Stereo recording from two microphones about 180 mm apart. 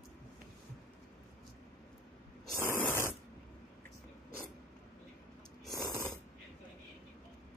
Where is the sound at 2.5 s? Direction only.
15° left (ahead or behind).